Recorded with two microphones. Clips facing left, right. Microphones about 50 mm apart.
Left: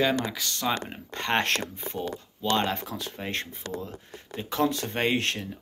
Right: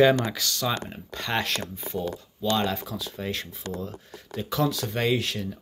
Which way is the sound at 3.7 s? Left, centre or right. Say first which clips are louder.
Right 1 dB; left.